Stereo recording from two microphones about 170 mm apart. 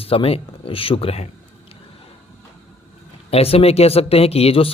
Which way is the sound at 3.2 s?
35° left (ahead or behind).